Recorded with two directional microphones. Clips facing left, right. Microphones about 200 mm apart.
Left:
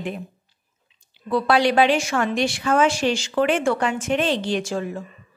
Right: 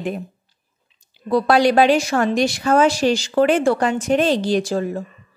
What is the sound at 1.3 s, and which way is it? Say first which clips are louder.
A woman's voice: right 4 dB; 40° right (ahead or behind).